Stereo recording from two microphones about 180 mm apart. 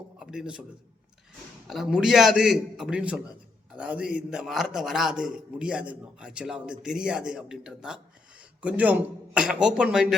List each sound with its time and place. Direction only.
0.2 s a man's voice: 5° right (ahead or behind)
1.7 s a man's voice: centre (ahead or behind)